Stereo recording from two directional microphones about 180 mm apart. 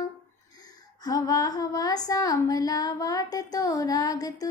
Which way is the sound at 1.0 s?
20° left (ahead or behind).